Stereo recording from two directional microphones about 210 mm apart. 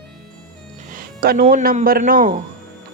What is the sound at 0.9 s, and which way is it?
Music, 45° right (ahead or behind).